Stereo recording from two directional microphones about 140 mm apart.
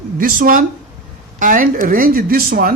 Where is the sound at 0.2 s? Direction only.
90° right.